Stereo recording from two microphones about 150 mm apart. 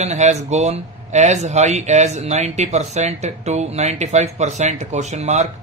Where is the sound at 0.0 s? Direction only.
50° right (ahead or behind).